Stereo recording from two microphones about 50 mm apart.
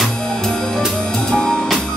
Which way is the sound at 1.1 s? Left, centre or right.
Centre.